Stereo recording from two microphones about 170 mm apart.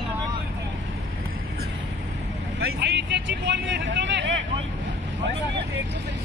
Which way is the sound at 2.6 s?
85° right.